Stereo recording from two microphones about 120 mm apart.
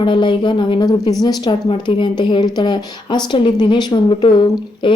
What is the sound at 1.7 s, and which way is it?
Speech, 45° left (ahead or behind).